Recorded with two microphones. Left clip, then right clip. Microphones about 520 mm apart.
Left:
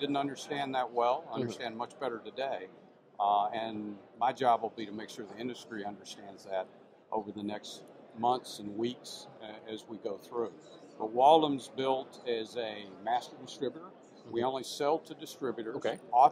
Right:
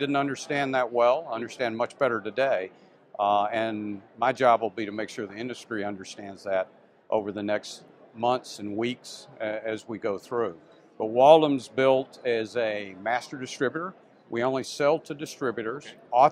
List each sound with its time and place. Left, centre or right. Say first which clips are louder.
0.0 s speech: right 7 dB; right